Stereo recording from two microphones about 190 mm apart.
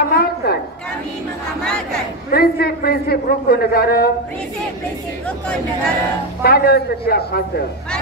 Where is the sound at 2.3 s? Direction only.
55° left (ahead or behind).